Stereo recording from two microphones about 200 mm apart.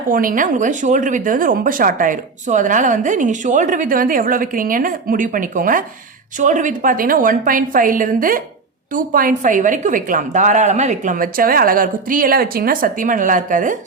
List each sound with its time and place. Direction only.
0.1 s a woman's voice: 45° right (ahead or behind)